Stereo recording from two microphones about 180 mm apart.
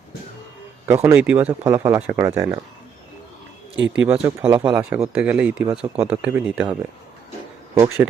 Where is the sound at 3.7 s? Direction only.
85° right.